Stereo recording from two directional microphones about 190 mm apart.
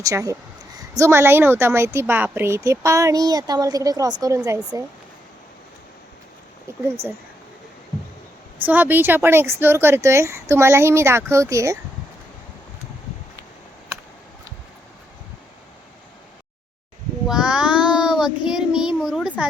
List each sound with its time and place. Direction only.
0.0 s speech: 15° right (ahead or behind)
6.7 s speech: 15° right (ahead or behind)
8.6 s speech: 10° right (ahead or behind)
17.2 s child singing: 5° right (ahead or behind)